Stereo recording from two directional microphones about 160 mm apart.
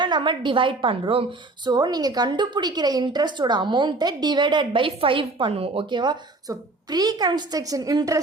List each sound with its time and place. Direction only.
0.0 s a woman's voice: 30° right (ahead or behind)